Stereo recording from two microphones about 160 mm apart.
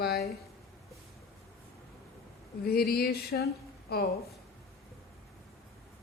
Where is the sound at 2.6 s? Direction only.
75° left (ahead or behind).